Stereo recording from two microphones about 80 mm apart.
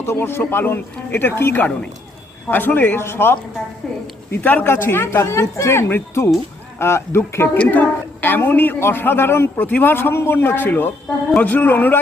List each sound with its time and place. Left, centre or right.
0.0 s a woman's voice: left
3.8 s a woman's voice: centre
4.4 s a woman's voice: left